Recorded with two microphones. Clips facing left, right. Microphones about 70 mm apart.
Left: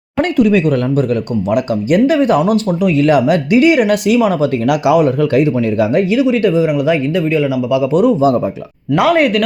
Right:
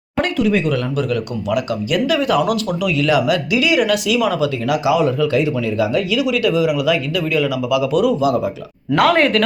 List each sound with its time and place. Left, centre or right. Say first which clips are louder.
0.2 s speech: left 5 dB; left
4.7 s speech: left 4 dB; left
6.1 s speech: left 3 dB; left
9.0 s speech: left 2 dB; centre